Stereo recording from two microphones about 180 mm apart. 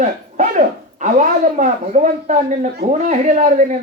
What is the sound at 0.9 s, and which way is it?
Speech, 45° right (ahead or behind).